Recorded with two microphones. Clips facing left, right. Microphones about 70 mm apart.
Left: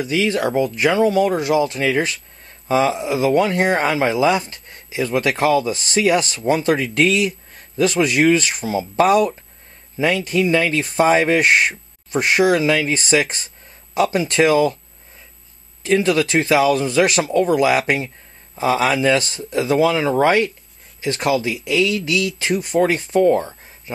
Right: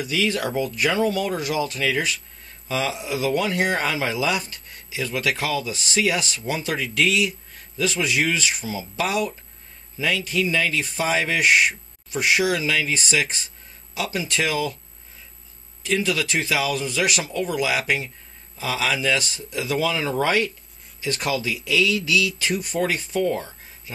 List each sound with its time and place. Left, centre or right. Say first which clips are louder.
0.0 s speech: left 5 dB; left
10.5 s speech: left 6 dB; left
14.4 s speech: left 11 dB; left
15.8 s speech: left 7 dB; left